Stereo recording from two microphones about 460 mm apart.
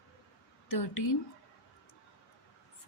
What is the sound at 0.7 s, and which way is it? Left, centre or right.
Speech, left.